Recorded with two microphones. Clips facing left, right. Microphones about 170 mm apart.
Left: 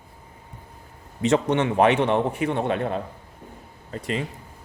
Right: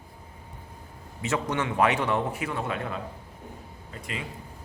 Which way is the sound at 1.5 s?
30° left (ahead or behind).